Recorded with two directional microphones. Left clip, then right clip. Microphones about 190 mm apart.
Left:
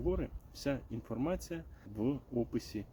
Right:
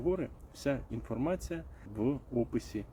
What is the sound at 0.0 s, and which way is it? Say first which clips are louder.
Speech: right 3 dB; 5° left (ahead or behind).